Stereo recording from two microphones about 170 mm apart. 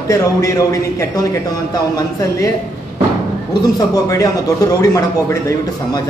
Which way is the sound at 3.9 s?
20° left (ahead or behind).